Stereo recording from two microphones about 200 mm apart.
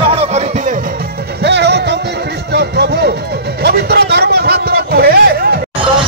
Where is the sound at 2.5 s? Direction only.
55° right (ahead or behind).